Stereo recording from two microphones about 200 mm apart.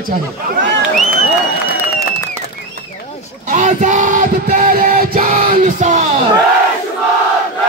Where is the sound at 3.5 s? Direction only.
40° right (ahead or behind).